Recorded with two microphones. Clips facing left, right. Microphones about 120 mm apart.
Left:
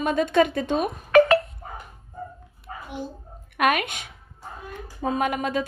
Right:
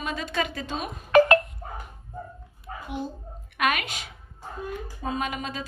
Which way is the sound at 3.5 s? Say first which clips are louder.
Left 4 dB; 50° left (ahead or behind).